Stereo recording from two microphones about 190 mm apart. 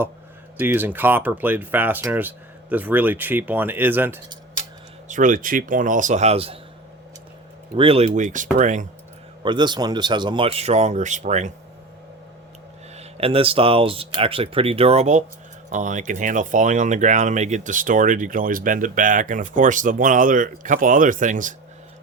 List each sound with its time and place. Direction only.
0.6 s speech: 10° right (ahead or behind)
5.0 s speech: 45° right (ahead or behind)
7.8 s speech: 30° right (ahead or behind)
9.4 s speech: 25° right (ahead or behind)
13.0 s speech: 30° right (ahead or behind)